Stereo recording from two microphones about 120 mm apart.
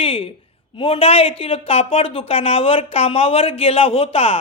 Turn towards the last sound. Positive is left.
turn(degrees=55)  # may be behind; listen again after turning